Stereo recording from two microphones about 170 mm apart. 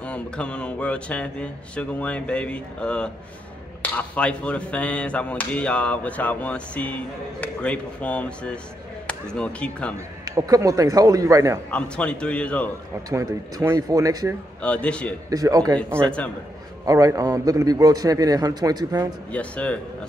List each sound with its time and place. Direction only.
0.0 s speech: 5° left (ahead or behind)
10.2 s a man's voice: 20° right (ahead or behind)
11.7 s speech: 5° left (ahead or behind)
13.1 s a man's voice: 20° right (ahead or behind)
14.6 s speech: 5° left (ahead or behind)
15.2 s a man's voice: 20° right (ahead or behind)
16.0 s speech: 5° left (ahead or behind)
16.8 s a man's voice: 20° right (ahead or behind)
19.3 s speech: 10° left (ahead or behind)